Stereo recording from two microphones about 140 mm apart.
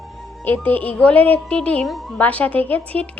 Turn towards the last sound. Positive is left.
turn(degrees=10)  # may be behind; listen again after turning